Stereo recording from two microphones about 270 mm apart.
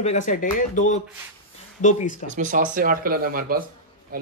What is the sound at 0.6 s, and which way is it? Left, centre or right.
Speech, left.